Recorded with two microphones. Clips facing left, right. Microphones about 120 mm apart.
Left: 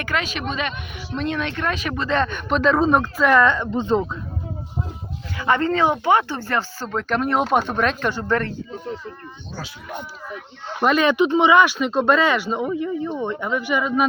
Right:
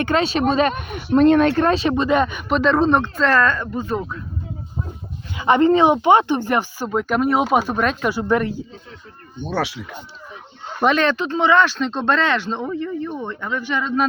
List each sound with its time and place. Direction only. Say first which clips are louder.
0.0 s speech: right 7 dB; 30° right (ahead or behind)
2.0 s speech: right 3 dB; 10° right (ahead or behind); by 4.0 s 25° left (ahead or behind)
5.4 s speech: right 5 dB; 20° right (ahead or behind)
9.4 s speech: right 15 dB; 65° right (ahead or behind)
10.8 s speech: left 1 dB; 5° left (ahead or behind)